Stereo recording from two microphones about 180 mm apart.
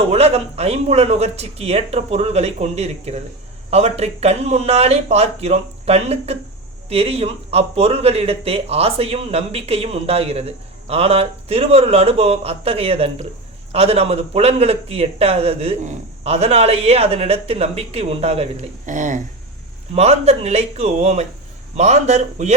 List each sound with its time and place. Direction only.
0.1 s speech: 35° right (ahead or behind)
18.9 s speech: 45° right (ahead or behind)